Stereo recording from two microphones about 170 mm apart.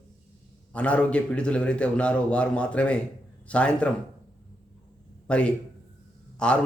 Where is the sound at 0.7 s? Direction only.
5° left (ahead or behind).